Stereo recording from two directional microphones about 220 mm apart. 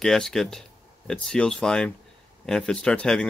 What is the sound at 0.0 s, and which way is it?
Speech, centre (ahead or behind).